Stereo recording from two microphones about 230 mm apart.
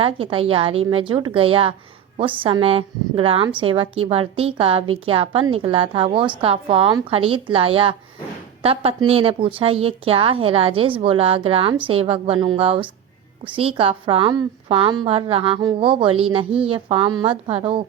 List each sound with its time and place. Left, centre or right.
0.0 s a woman's voice: right